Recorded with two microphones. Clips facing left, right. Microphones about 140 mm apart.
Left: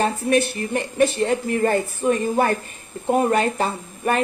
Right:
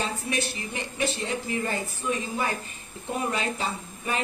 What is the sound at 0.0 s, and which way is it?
Speech, 55° left (ahead or behind).